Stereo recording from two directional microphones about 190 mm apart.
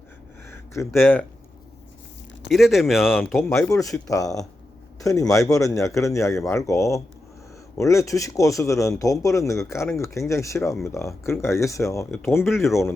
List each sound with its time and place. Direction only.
0.4 s a sound: 15° left (ahead or behind)
2.5 s speech: centre (ahead or behind)
3.5 s a man's voice: 15° left (ahead or behind)